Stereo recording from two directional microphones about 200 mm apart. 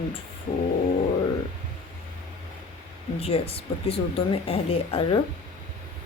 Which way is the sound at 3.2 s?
30° left (ahead or behind).